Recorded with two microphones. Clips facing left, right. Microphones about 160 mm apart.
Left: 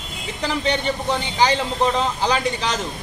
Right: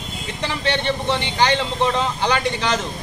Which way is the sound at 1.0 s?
5° left (ahead or behind).